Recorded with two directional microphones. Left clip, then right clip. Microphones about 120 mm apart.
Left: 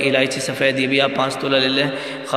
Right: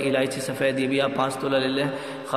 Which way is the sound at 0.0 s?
25° left (ahead or behind).